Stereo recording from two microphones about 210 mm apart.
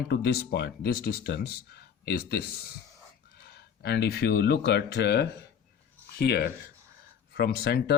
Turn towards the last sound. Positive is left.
turn(degrees=50)  # may be behind; listen again after turning